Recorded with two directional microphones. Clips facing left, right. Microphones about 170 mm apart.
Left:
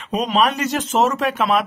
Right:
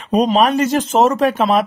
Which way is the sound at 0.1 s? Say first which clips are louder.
Right 5 dB; 40° right (ahead or behind).